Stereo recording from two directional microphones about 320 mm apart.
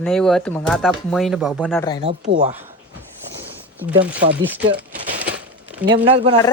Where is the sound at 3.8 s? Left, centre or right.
Centre.